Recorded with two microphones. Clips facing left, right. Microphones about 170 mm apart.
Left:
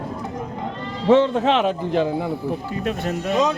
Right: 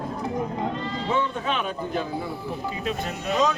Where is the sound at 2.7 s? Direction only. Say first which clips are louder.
Left 3 dB; 55° left (ahead or behind).